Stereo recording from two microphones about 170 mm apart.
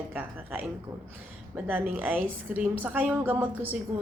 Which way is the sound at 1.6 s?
10° right (ahead or behind).